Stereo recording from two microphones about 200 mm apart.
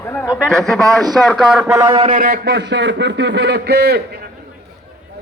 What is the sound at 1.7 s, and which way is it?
Speech, 25° right (ahead or behind).